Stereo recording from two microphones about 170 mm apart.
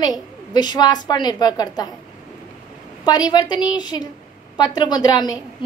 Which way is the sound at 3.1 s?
20° left (ahead or behind).